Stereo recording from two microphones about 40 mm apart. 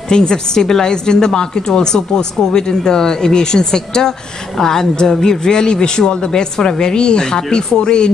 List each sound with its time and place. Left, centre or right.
0.1 s a woman's voice: centre